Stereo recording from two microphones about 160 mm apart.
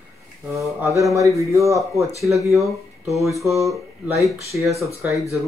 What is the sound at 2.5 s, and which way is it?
Speech, centre (ahead or behind).